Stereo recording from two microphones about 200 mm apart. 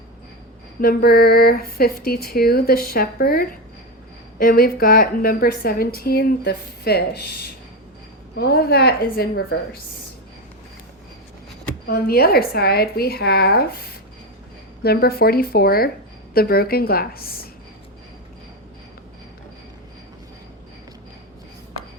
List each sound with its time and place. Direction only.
0.8 s a woman's voice: 50° left (ahead or behind)
11.9 s a woman's voice: 50° left (ahead or behind)
14.8 s a woman's voice: 50° left (ahead or behind)